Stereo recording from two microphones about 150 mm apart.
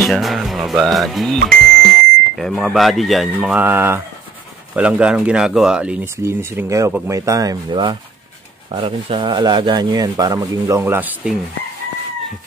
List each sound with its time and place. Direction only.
0.0 s speech: centre (ahead or behind)